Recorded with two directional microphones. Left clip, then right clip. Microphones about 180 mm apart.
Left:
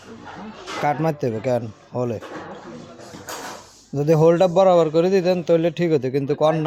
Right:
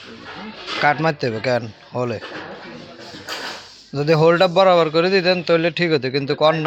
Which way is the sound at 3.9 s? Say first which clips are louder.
Right 1 dB; 20° left (ahead or behind).